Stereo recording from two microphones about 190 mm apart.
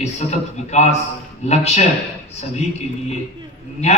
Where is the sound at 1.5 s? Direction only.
35° left (ahead or behind).